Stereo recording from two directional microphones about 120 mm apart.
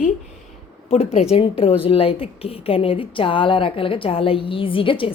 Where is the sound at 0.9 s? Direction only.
65° left (ahead or behind).